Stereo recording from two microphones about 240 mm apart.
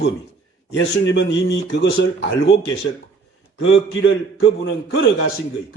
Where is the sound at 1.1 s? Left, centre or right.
Left.